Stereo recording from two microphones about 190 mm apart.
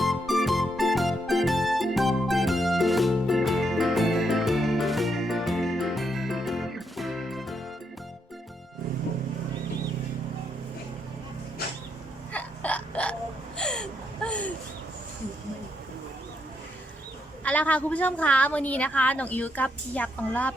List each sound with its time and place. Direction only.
0.0 s music: centre (ahead or behind)
12.3 s hiccup: 5° left (ahead or behind)
13.6 s a sound: 5° left (ahead or behind)
17.4 s a woman's voice: 5° left (ahead or behind)